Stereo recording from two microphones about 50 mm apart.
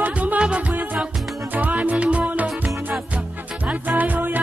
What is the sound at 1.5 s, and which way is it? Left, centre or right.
Music, right.